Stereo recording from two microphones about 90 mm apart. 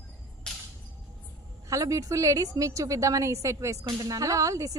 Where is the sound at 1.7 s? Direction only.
35° right (ahead or behind).